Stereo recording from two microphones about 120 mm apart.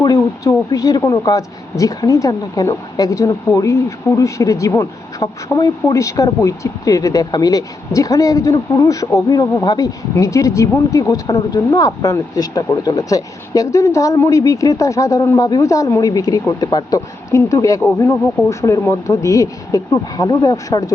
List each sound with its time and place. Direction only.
0.0 s speech: 30° left (ahead or behind)